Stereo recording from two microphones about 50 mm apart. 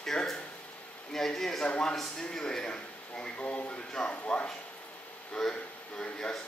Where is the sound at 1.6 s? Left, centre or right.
Left.